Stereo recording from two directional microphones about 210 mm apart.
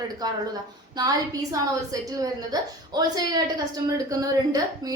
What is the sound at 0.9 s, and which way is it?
A woman's voice, 15° right (ahead or behind).